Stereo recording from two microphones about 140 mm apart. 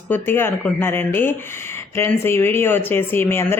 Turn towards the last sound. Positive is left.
turn(degrees=15)  # may be behind; listen again after turning